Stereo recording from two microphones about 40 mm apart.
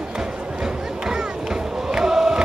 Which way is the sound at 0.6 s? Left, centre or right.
Centre.